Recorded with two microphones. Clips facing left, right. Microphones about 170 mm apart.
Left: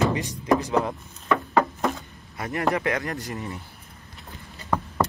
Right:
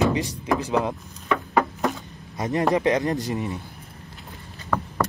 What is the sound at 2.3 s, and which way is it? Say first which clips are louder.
Speech: right 4 dB; 20° right (ahead or behind).